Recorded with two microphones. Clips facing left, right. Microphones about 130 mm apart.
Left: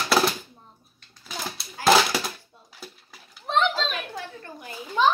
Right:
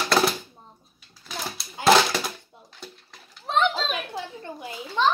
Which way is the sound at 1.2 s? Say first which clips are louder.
Even; centre (ahead or behind).